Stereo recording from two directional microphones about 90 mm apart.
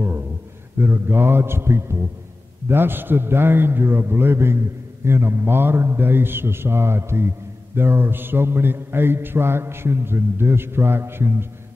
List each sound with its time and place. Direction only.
0.7 s a man's voice: 25° right (ahead or behind)